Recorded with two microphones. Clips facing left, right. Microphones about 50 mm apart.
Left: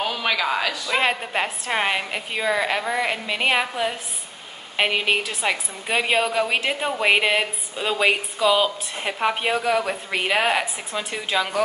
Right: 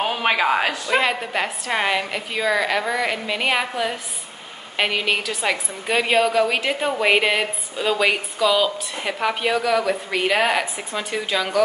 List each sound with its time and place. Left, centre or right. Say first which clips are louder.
0.0 s speech: right 3 dB; right
1.4 s a woman's voice: right 1 dB; centre
10.2 s a woman's voice: right 1 dB; centre